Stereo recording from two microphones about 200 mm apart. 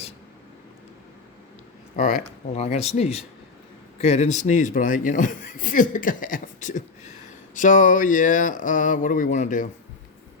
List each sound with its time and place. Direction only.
2.0 s a man's voice: 35° left (ahead or behind)